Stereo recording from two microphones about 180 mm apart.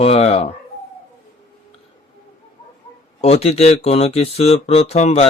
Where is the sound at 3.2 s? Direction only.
35° left (ahead or behind).